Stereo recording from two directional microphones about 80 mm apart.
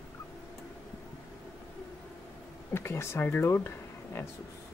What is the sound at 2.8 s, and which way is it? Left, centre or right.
Speech, left.